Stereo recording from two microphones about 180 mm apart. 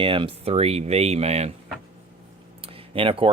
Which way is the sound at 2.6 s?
30° right (ahead or behind).